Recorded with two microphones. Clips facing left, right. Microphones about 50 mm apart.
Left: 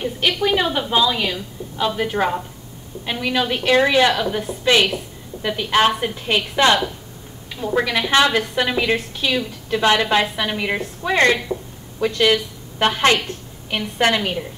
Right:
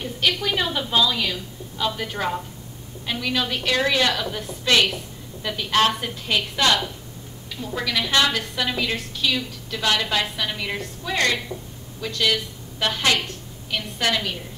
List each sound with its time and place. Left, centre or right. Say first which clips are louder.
0.0 s a woman's voice: left 4 dB; centre